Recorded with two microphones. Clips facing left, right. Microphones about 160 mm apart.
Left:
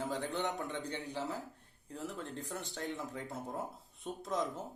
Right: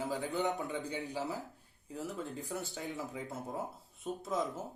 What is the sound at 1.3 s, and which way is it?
Speech, 5° right (ahead or behind).